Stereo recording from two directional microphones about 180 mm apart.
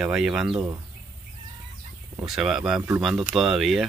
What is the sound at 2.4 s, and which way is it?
Speech, 5° right (ahead or behind).